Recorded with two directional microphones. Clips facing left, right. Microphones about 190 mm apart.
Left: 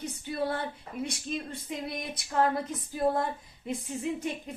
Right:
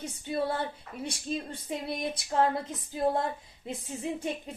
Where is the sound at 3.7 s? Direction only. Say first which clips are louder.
Left 2 dB; 30° right (ahead or behind).